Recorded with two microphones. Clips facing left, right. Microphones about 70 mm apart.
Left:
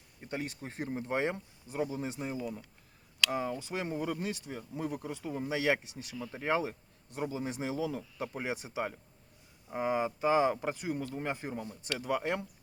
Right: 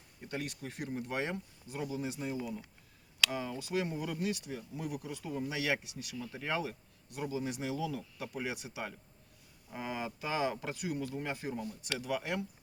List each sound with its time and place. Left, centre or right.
0.3 s speech: left